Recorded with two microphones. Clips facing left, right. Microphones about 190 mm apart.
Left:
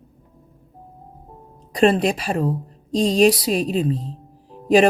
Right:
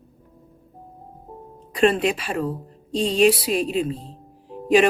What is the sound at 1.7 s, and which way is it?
Speech, 40° left (ahead or behind).